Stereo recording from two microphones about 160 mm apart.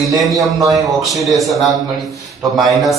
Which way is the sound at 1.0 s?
Centre (ahead or behind).